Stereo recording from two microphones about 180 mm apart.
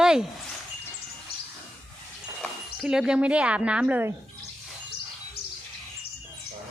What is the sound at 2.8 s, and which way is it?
A woman's voice, 5° right (ahead or behind).